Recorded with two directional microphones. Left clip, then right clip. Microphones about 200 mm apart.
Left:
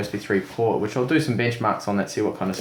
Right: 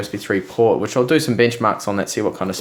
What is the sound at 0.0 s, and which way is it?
Speech, 40° right (ahead or behind).